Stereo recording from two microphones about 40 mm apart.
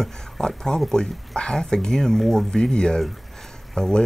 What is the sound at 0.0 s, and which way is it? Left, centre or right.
Speech, centre.